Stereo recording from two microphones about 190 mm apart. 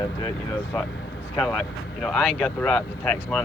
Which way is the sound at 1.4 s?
Centre (ahead or behind).